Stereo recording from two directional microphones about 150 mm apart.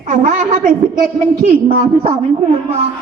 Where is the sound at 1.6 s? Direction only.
40° right (ahead or behind).